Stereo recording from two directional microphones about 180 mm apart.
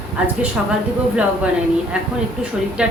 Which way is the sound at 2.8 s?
5° right (ahead or behind).